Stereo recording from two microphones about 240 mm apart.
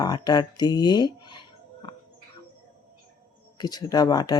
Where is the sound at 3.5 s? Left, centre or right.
Centre.